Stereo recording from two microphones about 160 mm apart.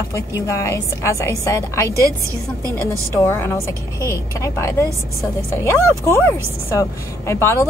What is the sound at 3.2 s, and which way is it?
A woman's voice, 15° left (ahead or behind).